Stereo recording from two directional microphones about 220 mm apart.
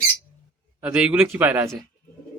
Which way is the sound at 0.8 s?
5° right (ahead or behind).